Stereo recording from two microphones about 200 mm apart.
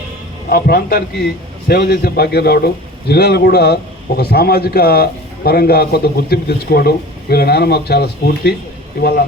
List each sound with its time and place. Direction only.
0.5 s a man's voice: 45° left (ahead or behind)